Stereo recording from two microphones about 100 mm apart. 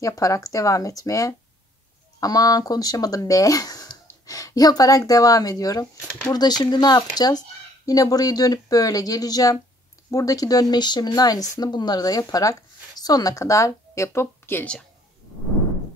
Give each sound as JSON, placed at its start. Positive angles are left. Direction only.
{"t": 0.0, "sound": "speech", "side_deg": 35}